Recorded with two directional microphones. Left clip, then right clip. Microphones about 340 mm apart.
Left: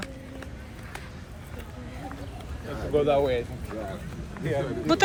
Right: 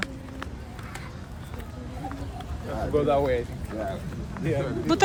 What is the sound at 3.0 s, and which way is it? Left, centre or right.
Speech, left.